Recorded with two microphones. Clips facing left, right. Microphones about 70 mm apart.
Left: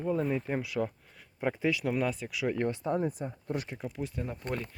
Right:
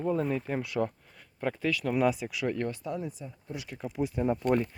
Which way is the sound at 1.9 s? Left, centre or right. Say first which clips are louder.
Right 4 dB; centre.